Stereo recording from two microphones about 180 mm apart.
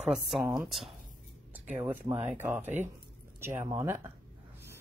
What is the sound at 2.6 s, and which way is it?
Speech, 40° right (ahead or behind).